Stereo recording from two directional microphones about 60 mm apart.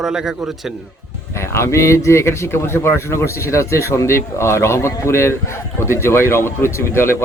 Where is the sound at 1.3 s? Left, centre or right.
Left.